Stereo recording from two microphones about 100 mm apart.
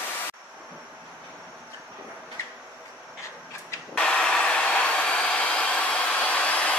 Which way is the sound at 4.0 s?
10° left (ahead or behind).